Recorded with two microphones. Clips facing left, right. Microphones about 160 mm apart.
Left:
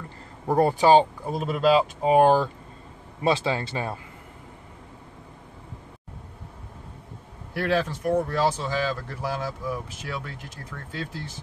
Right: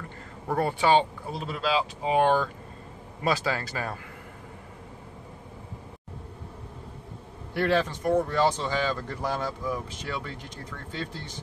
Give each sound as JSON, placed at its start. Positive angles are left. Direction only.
{"t": 0.5, "sound": "speech", "side_deg": 40}
{"t": 3.3, "sound": "speech", "side_deg": 25}
{"t": 7.5, "sound": "speech", "side_deg": 5}